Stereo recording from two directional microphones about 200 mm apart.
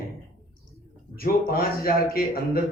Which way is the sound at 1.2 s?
45° left (ahead or behind).